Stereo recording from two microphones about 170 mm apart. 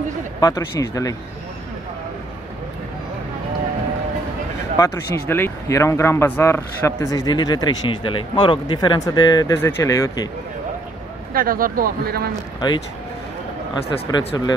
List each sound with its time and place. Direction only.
0.4 s speech: 20° left (ahead or behind)
4.7 s speech: 15° left (ahead or behind)
11.3 s speech: 55° right (ahead or behind)
12.5 s speech: 25° left (ahead or behind)
14.3 s speech: 25° left (ahead or behind)